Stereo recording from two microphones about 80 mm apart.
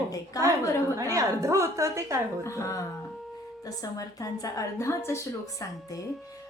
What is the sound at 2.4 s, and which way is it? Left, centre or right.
Speech, left.